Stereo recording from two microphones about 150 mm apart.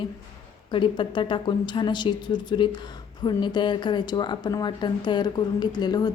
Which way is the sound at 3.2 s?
30° left (ahead or behind).